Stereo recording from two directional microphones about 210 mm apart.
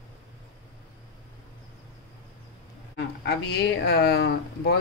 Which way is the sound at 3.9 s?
50° left (ahead or behind).